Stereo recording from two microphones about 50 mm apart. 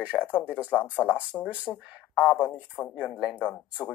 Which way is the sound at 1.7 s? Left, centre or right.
Left.